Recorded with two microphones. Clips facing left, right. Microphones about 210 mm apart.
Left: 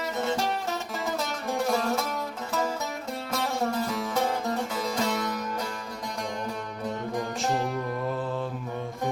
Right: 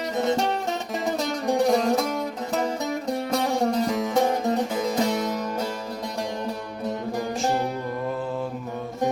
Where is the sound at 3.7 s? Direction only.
20° right (ahead or behind).